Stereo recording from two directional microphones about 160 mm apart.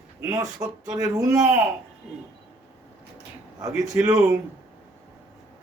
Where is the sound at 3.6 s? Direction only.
20° right (ahead or behind).